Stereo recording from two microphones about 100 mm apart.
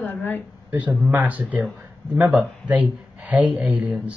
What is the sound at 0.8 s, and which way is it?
Speech, 10° right (ahead or behind).